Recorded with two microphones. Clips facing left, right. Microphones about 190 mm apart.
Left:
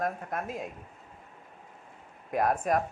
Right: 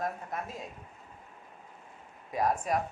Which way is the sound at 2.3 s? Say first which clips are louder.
Left 3 dB; 55° left (ahead or behind).